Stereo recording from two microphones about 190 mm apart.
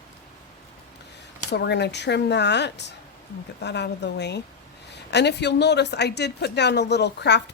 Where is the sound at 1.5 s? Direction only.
65° left (ahead or behind).